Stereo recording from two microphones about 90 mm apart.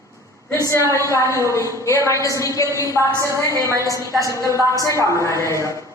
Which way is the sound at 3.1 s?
35° right (ahead or behind).